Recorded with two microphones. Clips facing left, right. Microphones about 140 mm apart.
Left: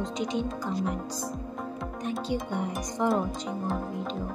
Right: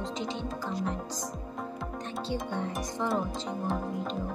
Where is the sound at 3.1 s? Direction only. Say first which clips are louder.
Left 3 dB; centre (ahead or behind).